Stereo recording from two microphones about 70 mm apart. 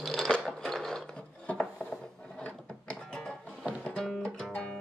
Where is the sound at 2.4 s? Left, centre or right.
Centre.